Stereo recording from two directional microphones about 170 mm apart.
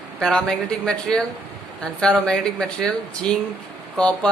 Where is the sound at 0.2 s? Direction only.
5° left (ahead or behind).